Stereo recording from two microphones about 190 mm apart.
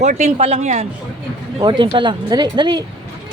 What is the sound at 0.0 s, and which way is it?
Speech, 35° right (ahead or behind).